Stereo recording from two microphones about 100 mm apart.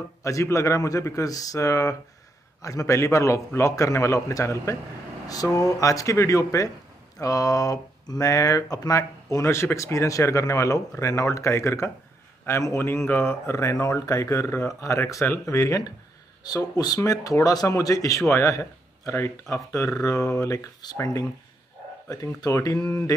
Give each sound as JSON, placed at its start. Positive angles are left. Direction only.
{"t": 0.2, "sound": "speech", "side_deg": 30}